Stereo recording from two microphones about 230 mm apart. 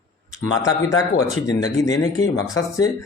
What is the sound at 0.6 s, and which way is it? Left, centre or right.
Speech, centre.